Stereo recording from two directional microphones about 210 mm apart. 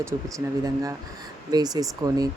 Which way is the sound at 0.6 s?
15° right (ahead or behind).